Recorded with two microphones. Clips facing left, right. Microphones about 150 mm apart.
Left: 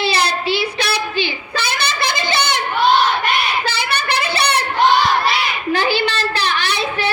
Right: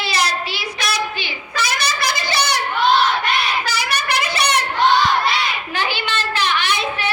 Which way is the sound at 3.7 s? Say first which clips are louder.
Left 1 dB; 30° left (ahead or behind).